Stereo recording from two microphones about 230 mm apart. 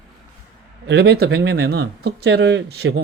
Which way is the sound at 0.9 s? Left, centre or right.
Right.